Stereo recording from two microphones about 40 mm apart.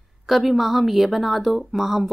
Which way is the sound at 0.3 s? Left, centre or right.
Centre.